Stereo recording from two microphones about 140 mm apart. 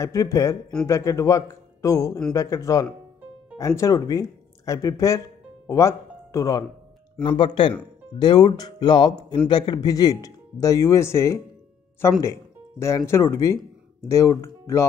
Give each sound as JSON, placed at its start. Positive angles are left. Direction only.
{"t": 0.0, "sound": "speech", "side_deg": 25}
{"t": 7.2, "sound": "speech", "side_deg": 35}